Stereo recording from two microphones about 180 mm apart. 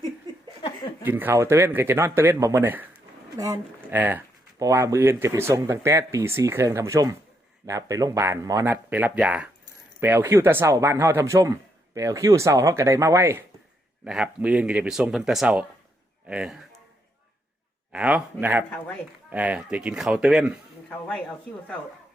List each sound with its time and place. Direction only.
1.0 s speech: 10° right (ahead or behind)
3.9 s speech: 10° right (ahead or behind)
16.2 s a sound: 5° right (ahead or behind)
17.9 s speech: 10° right (ahead or behind)